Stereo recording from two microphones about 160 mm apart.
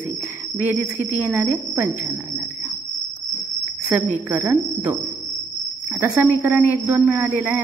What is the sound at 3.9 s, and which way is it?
Speech, 10° right (ahead or behind).